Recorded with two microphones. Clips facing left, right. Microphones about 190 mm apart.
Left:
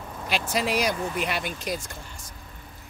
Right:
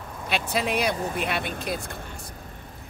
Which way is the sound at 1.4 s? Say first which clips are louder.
Right 1 dB; 60° right (ahead or behind).